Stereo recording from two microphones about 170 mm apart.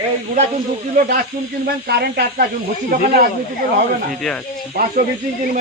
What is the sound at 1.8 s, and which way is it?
Speech, 70° right (ahead or behind).